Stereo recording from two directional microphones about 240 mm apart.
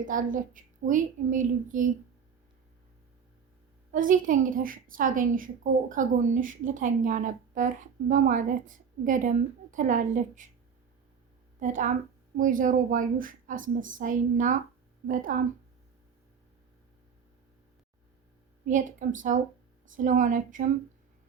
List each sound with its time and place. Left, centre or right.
0.0 s a woman's voice: right
3.9 s a woman's voice: right
11.6 s a woman's voice: right
18.6 s a woman's voice: right